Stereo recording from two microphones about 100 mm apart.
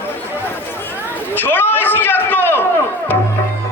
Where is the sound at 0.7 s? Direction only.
20° left (ahead or behind).